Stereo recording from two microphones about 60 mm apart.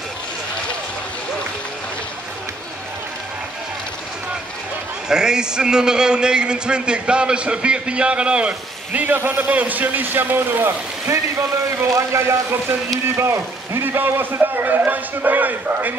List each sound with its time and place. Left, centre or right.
5.0 s a man's voice: centre
9.0 s a man's voice: right